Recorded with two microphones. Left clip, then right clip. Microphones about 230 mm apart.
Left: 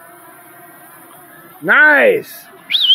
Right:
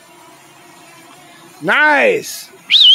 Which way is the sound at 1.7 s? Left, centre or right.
Centre.